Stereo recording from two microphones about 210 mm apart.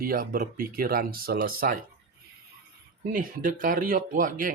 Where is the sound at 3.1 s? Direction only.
40° right (ahead or behind).